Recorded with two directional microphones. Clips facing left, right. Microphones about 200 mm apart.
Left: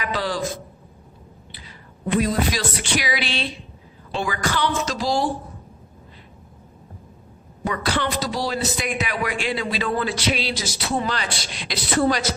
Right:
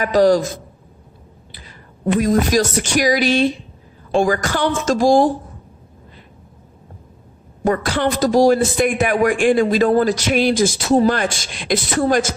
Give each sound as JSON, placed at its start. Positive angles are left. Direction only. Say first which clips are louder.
{"t": 0.0, "sound": "a man's voice", "louder": "right 13 dB", "side_deg": -45}
{"t": 2.2, "sound": "a man's voice", "louder": "right 7 dB", "side_deg": -45}
{"t": 7.6, "sound": "a man's voice", "louder": "right 6 dB", "side_deg": -45}